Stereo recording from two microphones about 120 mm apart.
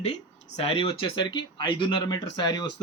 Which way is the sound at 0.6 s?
55° left (ahead or behind).